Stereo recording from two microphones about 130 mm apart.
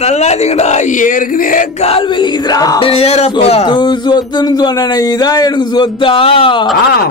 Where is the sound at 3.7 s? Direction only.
35° left (ahead or behind).